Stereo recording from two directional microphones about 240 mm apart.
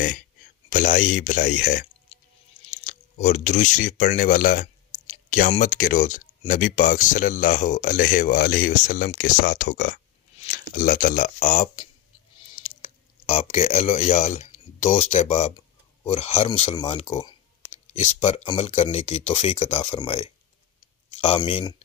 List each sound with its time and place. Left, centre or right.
0.7 s speech: left
17.9 s speech: left